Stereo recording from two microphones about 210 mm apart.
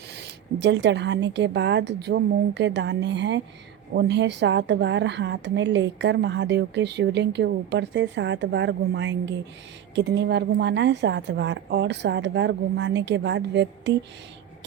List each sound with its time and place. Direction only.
0.1 s a woman's voice: 55° right (ahead or behind)